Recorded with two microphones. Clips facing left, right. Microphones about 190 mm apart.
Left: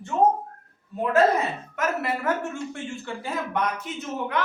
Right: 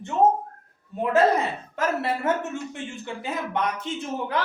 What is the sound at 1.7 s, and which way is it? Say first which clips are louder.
A woman's voice: right 2 dB; 30° right (ahead or behind).